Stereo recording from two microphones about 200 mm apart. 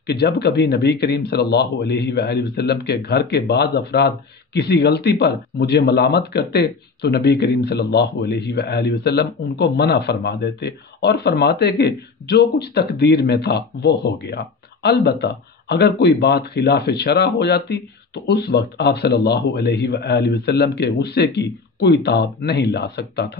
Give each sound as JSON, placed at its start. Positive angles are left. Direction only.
{"t": 0.0, "sound": "speech", "side_deg": 55}